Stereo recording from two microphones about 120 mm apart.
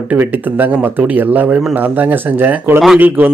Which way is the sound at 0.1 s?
15° right (ahead or behind).